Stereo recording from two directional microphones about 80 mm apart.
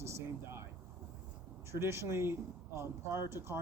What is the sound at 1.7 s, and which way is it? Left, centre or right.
A man's voice, right.